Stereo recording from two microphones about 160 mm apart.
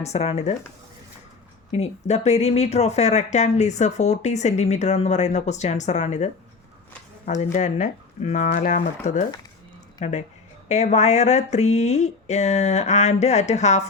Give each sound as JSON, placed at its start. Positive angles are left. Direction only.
{"t": 0.0, "sound": "speech", "side_deg": 40}
{"t": 1.7, "sound": "speech", "side_deg": 40}